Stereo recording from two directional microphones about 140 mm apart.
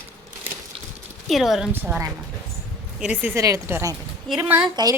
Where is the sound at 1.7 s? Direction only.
15° right (ahead or behind).